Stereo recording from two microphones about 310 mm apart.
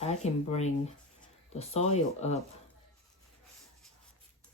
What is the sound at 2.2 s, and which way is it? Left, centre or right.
Speech, left.